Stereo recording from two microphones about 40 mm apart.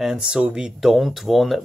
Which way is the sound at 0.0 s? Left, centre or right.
Centre.